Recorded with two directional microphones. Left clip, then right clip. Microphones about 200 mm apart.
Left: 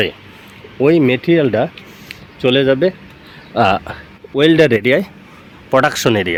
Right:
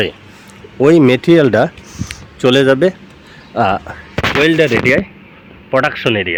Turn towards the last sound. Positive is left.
turn(degrees=25)  # may be behind; listen again after turning